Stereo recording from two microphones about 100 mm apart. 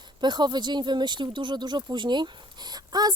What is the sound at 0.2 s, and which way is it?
Speech, 45° right (ahead or behind).